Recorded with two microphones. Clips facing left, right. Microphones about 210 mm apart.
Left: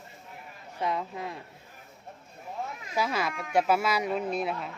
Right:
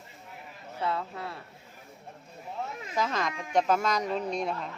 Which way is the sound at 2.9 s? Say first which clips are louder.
Left 1 dB; 10° left (ahead or behind).